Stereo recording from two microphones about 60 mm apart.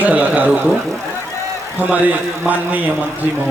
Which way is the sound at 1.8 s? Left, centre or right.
Right.